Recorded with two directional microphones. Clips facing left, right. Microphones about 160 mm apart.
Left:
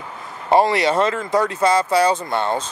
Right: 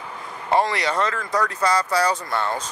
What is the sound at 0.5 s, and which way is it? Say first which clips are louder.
Speech: left 5 dB; 25° left (ahead or behind).